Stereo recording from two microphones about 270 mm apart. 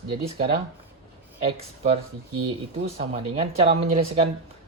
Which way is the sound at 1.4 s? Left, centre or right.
Right.